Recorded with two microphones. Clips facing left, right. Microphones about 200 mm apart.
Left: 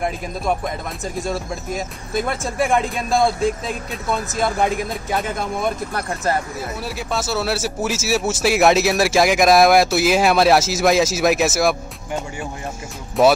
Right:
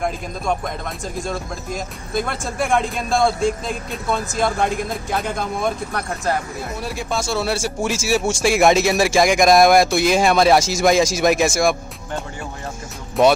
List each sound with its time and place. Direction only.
0.0 s speech: 5° left (ahead or behind)
13.2 s speech: centre (ahead or behind)